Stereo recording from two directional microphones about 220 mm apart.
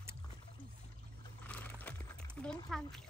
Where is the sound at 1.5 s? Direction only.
10° left (ahead or behind).